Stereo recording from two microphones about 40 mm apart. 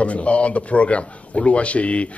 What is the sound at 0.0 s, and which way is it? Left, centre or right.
A man's voice, left.